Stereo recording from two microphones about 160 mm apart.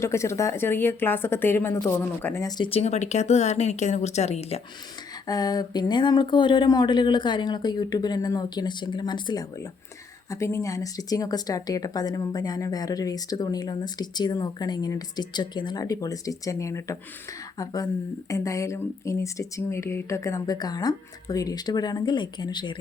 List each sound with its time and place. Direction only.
0.0 s a woman's voice: 15° left (ahead or behind)
2.6 s speech: 40° left (ahead or behind)
5.3 s speech: 25° left (ahead or behind)
18.3 s speech: 20° left (ahead or behind)